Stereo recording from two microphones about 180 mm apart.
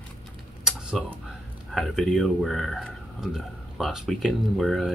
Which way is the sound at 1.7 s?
Centre (ahead or behind).